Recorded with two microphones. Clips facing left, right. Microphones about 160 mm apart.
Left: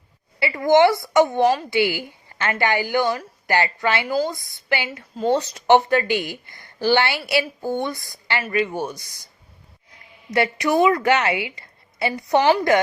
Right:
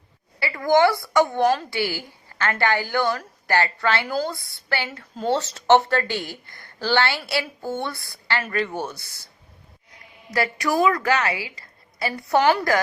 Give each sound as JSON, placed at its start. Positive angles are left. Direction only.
{"t": 0.3, "sound": "a woman's voice", "side_deg": 20}
{"t": 10.3, "sound": "a woman's voice", "side_deg": 25}